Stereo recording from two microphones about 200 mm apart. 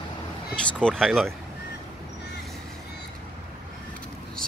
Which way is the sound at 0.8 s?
Centre (ahead or behind).